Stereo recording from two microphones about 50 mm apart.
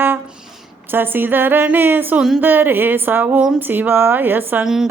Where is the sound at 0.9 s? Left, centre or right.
Right.